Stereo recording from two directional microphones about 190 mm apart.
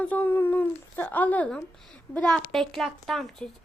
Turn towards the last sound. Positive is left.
turn(degrees=0)  # may be behind; listen again after turning